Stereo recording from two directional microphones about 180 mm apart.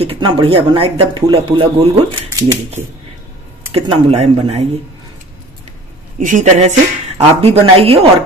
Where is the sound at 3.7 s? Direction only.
25° right (ahead or behind).